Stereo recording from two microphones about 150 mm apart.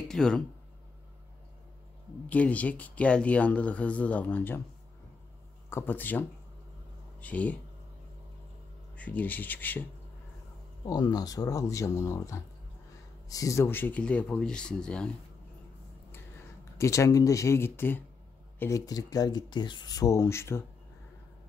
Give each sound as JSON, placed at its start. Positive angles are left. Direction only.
{"t": 0.1, "sound": "speech", "side_deg": 5}
{"t": 2.2, "sound": "speech", "side_deg": 10}
{"t": 5.7, "sound": "speech", "side_deg": 15}
{"t": 8.9, "sound": "speech", "side_deg": 10}
{"t": 10.9, "sound": "speech", "side_deg": 25}
{"t": 16.7, "sound": "speech", "side_deg": 20}